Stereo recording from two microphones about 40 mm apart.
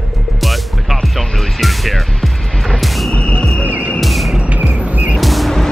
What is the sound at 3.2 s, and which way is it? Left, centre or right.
Cricket, left.